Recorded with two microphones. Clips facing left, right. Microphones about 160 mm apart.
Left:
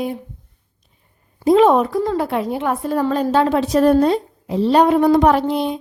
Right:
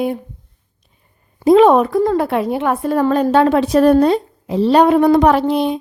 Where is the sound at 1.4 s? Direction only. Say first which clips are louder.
Right 3 dB; 70° right (ahead or behind).